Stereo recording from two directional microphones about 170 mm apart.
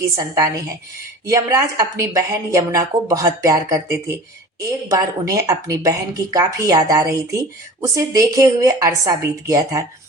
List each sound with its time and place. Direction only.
0.2 s speech: 20° right (ahead or behind)